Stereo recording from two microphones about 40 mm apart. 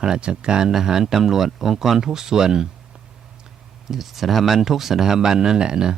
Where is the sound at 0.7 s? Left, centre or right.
Centre.